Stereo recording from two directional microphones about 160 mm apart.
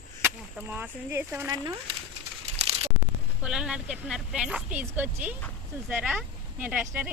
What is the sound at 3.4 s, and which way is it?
Speech, 5° right (ahead or behind).